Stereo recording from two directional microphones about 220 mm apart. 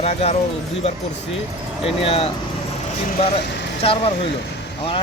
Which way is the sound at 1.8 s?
25° left (ahead or behind).